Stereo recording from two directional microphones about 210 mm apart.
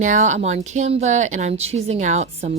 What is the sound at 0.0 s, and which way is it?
A woman's voice, 35° right (ahead or behind).